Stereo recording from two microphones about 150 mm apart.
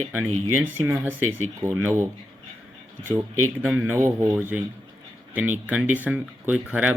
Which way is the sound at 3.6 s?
15° right (ahead or behind).